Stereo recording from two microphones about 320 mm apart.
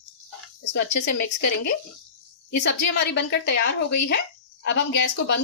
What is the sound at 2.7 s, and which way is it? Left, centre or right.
Speech, left.